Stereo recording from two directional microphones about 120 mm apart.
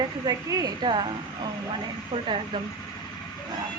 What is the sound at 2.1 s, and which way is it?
Speech, 60° right (ahead or behind).